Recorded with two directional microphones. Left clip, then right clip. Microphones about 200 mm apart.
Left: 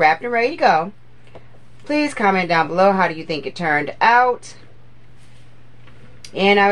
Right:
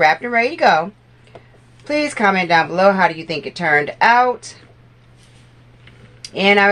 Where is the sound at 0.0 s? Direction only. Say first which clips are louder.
Right 1 dB; 20° left (ahead or behind).